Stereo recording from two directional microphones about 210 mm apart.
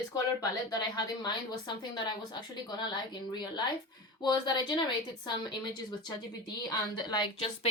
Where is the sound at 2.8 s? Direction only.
20° left (ahead or behind).